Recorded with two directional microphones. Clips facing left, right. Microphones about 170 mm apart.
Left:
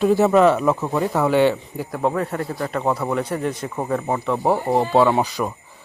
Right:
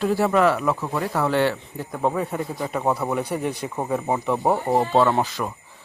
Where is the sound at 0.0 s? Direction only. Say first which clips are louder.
Left 4 dB; 15° left (ahead or behind).